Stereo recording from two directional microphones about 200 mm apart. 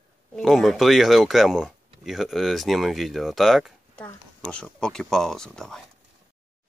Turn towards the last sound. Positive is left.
turn(degrees=5)  # may be behind; listen again after turning